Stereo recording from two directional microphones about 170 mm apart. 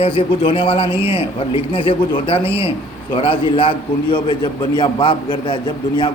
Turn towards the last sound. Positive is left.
turn(degrees=30)  # may be behind; listen again after turning